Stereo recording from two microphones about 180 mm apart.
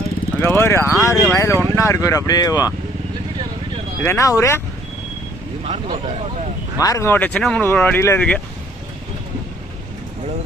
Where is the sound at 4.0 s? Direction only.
15° left (ahead or behind).